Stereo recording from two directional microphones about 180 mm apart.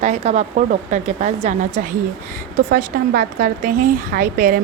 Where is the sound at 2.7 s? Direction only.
55° right (ahead or behind).